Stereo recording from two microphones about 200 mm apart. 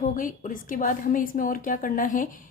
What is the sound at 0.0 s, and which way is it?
A woman's voice, 40° left (ahead or behind).